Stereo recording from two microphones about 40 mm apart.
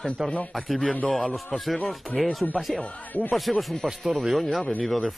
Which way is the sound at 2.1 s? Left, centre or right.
Left.